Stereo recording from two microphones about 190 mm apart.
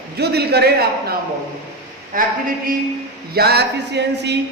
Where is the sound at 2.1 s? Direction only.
45° right (ahead or behind).